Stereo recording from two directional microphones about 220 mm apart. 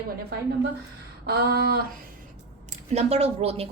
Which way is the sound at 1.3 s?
45° right (ahead or behind).